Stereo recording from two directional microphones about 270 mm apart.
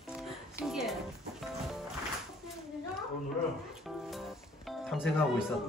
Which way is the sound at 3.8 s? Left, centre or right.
Centre.